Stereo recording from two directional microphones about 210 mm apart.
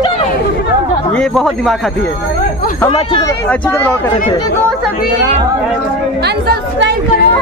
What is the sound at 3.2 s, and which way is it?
Speech, 5° left (ahead or behind).